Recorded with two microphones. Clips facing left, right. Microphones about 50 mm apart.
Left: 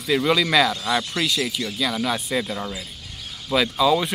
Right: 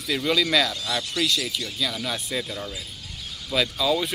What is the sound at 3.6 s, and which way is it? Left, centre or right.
Speech, centre.